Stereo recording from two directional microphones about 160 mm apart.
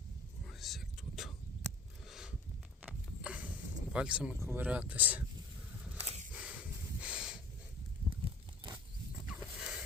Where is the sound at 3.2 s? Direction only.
10° right (ahead or behind).